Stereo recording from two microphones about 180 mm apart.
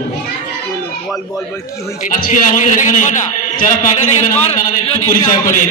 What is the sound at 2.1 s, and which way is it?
A man's voice, 45° left (ahead or behind).